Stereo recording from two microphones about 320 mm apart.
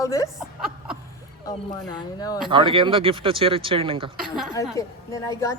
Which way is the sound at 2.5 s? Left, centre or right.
Centre.